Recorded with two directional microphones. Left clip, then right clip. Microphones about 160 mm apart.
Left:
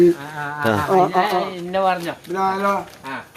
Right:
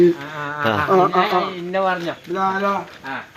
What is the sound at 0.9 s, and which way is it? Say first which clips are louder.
Speech: right 1 dB; 40° right (ahead or behind).